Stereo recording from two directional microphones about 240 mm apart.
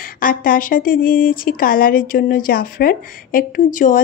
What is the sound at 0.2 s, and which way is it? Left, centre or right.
Speech, left.